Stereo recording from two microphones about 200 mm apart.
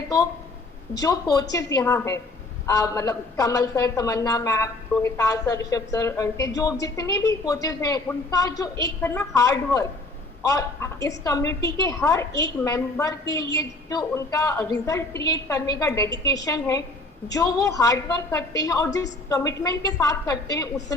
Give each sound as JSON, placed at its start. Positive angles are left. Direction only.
{"t": 0.9, "sound": "a woman's voice", "side_deg": 20}